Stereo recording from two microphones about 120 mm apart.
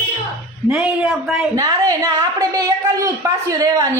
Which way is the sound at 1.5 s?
30° right (ahead or behind).